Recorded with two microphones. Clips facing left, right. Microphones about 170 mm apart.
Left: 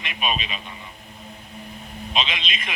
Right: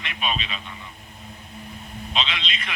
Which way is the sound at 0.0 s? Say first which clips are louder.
Left 1 dB; 15° left (ahead or behind).